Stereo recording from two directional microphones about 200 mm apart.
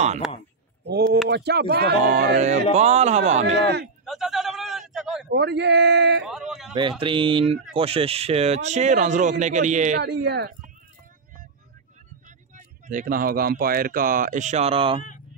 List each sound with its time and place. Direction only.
0.8 s a sound: 55° right (ahead or behind)
1.3 s speech: 55° right (ahead or behind)
2.3 s speech: 35° right (ahead or behind)
3.5 s speech: 55° right (ahead or behind)
4.0 s a sound: centre (ahead or behind)
5.3 s speech: 55° right (ahead or behind)
6.2 s a sound: centre (ahead or behind)
6.7 s speech: 25° right (ahead or behind)
10.0 s speech: 55° right (ahead or behind)
12.5 s speech: 40° right (ahead or behind)